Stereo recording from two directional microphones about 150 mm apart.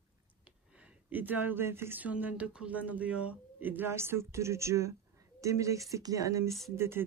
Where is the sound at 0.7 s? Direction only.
10° right (ahead or behind).